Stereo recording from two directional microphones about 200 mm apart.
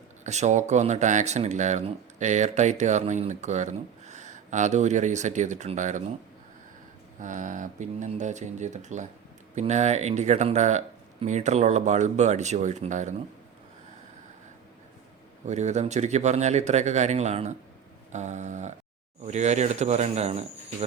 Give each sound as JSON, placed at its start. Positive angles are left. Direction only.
{"t": 0.3, "sound": "speech", "side_deg": -35}
{"t": 7.2, "sound": "speech", "side_deg": -40}
{"t": 15.4, "sound": "speech", "side_deg": -35}